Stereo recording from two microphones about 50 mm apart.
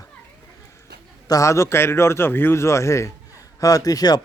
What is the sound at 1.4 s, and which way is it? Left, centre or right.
Speech, left.